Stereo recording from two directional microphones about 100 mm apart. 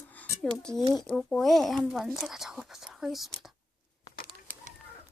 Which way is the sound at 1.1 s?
Centre (ahead or behind).